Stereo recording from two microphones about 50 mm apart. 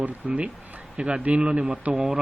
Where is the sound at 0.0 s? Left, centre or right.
Right.